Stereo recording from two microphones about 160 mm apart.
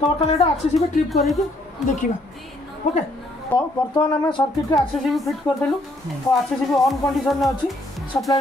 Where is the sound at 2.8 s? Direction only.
50° left (ahead or behind).